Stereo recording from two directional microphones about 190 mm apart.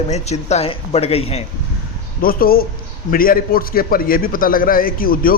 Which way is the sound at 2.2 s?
50° left (ahead or behind).